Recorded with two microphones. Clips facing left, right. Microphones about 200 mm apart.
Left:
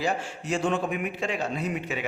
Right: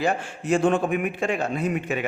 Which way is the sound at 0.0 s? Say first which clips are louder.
Right 4 dB; 55° right (ahead or behind).